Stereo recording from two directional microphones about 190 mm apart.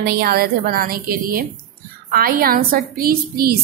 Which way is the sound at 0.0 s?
55° right (ahead or behind).